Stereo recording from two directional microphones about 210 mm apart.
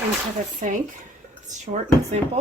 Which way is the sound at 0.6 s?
35° right (ahead or behind).